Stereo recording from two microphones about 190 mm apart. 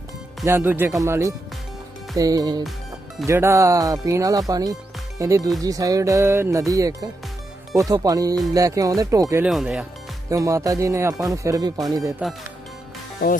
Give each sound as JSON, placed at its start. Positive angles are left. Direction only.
{"t": 0.4, "sound": "speech", "side_deg": -10}
{"t": 9.4, "sound": "speech", "side_deg": -5}
{"t": 10.2, "sound": "speech", "side_deg": -20}